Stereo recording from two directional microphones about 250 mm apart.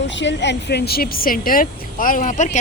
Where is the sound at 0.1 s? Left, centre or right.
Left.